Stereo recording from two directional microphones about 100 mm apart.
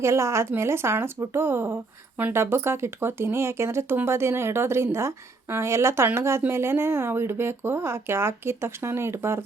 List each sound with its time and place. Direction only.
0.0 s speech: 30° right (ahead or behind)